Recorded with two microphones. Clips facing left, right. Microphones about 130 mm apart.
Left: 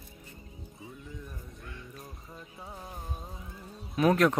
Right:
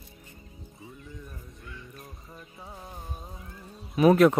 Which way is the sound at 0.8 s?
Centre (ahead or behind).